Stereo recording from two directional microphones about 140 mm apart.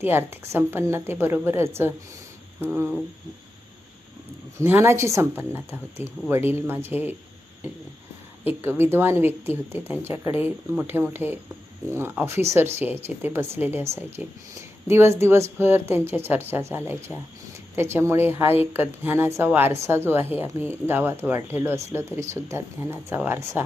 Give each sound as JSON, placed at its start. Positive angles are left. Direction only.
{"t": 0.0, "sound": "speech", "side_deg": -15}
{"t": 4.5, "sound": "speech", "side_deg": -20}
{"t": 8.6, "sound": "speech", "side_deg": -15}